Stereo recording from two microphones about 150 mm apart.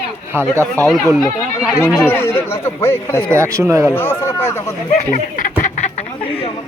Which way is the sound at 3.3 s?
20° right (ahead or behind).